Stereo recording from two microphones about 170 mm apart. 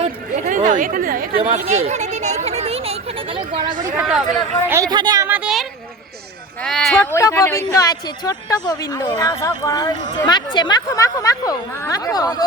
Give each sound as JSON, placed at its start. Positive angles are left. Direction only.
{"t": 0.0, "sound": "chatter", "side_deg": -45}
{"t": 1.5, "sound": "a sound", "side_deg": -40}
{"t": 3.9, "sound": "speech", "side_deg": 0}
{"t": 4.7, "sound": "a woman's voice", "side_deg": -20}
{"t": 5.3, "sound": "a sound", "side_deg": -5}
{"t": 6.6, "sound": "speech", "side_deg": 5}
{"t": 7.0, "sound": "a woman's voice", "side_deg": 15}